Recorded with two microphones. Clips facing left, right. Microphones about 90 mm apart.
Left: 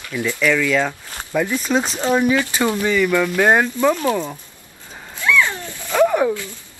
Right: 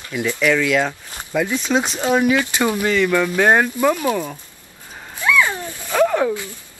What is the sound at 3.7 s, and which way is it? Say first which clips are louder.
Speech: even; 10° right (ahead or behind).